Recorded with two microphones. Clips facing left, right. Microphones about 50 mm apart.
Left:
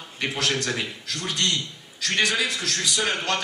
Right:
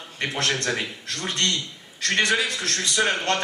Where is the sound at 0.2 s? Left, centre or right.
Right.